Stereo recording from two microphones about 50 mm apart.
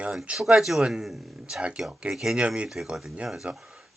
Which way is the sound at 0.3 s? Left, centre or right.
Centre.